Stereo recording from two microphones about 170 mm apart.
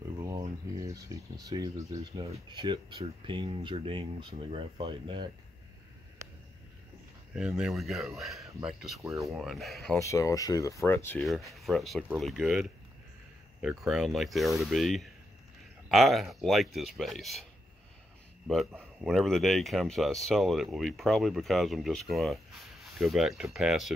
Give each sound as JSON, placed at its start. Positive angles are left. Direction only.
{"t": 0.2, "sound": "speech", "side_deg": -20}
{"t": 7.3, "sound": "speech", "side_deg": -5}
{"t": 9.9, "sound": "speech", "side_deg": 20}
{"t": 11.2, "sound": "speech", "side_deg": 0}
{"t": 18.8, "sound": "speech", "side_deg": 0}